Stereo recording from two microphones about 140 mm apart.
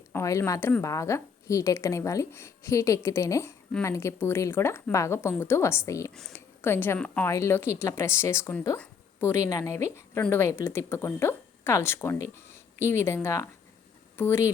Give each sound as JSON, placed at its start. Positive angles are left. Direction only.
{"t": 0.1, "sound": "a woman's voice", "side_deg": 20}
{"t": 7.3, "sound": "a woman's voice", "side_deg": 20}